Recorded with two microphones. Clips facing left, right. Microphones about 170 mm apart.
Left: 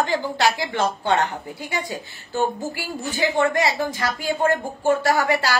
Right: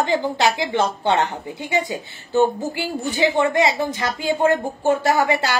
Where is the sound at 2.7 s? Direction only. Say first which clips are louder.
Right 4 dB; 20° right (ahead or behind).